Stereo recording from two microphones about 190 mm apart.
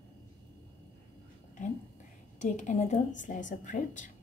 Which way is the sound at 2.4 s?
40° left (ahead or behind).